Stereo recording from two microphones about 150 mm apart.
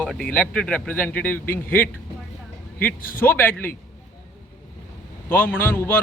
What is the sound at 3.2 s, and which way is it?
Speech, 15° left (ahead or behind).